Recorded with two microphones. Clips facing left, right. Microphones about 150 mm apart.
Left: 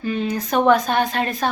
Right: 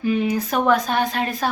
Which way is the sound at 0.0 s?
10° right (ahead or behind).